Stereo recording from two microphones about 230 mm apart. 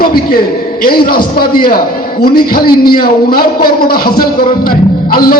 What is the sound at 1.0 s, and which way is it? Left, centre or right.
Speech, left.